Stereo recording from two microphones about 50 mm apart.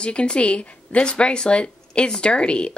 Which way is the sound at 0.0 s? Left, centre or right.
Centre.